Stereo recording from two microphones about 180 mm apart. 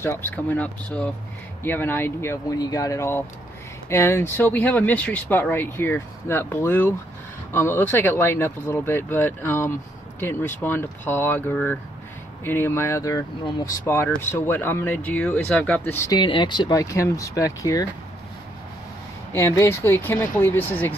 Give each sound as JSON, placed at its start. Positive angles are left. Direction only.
{"t": 0.0, "sound": "speech", "side_deg": 10}
{"t": 16.1, "sound": "speech", "side_deg": 25}
{"t": 19.3, "sound": "speech", "side_deg": 15}